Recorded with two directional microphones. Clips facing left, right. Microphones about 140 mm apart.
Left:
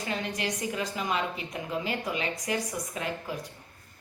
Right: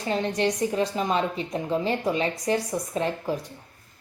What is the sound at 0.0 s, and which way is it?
Music, 35° right (ahead or behind).